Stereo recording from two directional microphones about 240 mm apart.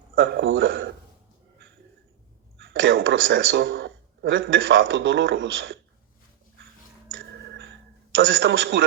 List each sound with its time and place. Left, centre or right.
0.2 s a sound: right
2.6 s speech: right
7.1 s organ: right
8.1 s a man's voice: right